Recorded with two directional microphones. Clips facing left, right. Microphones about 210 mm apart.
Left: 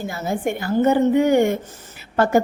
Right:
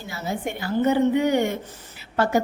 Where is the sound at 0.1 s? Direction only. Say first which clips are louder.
Left 3 dB; 50° left (ahead or behind).